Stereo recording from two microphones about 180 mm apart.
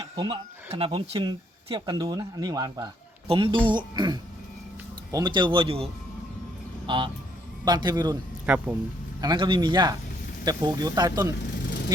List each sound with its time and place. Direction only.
0.0 s a man's voice: 30° right (ahead or behind)
8.4 s speech: 10° right (ahead or behind)
9.2 s speech: 25° right (ahead or behind)